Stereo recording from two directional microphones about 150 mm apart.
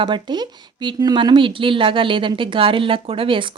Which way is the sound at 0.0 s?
30° right (ahead or behind).